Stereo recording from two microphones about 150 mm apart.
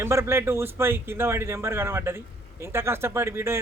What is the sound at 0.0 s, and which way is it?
Speech, 15° right (ahead or behind).